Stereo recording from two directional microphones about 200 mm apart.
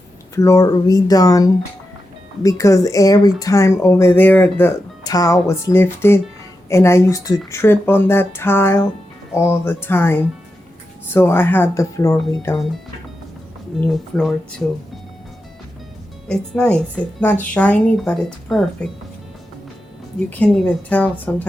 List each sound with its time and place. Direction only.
0.3 s speech: 15° left (ahead or behind)
13.8 s a woman's voice: centre (ahead or behind)
16.3 s a woman's voice: 5° left (ahead or behind)
20.4 s speech: 5° left (ahead or behind)